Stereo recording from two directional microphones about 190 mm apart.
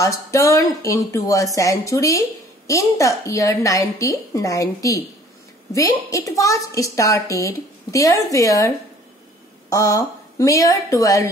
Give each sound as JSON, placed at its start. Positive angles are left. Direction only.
{"t": 0.0, "sound": "speech", "side_deg": 15}